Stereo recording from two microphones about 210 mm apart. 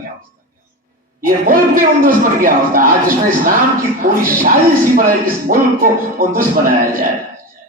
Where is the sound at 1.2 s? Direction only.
40° right (ahead or behind).